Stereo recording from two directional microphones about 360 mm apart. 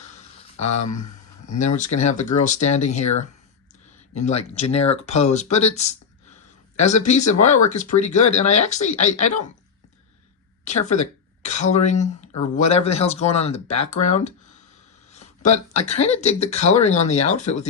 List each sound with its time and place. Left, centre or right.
0.6 s speech: left
1.5 s speech: centre
4.1 s speech: centre
10.7 s speech: centre
15.1 s a sound: centre
15.9 s speech: centre